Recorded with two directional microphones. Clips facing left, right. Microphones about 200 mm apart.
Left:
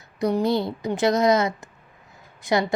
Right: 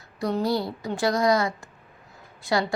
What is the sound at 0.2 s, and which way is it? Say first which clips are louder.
A woman's voice: left 3 dB; 20° left (ahead or behind).